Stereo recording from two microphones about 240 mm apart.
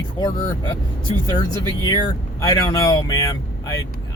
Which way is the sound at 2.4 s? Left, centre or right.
Centre.